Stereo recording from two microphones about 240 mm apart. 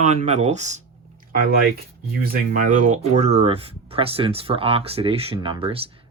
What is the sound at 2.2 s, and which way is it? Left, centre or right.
Speech, right.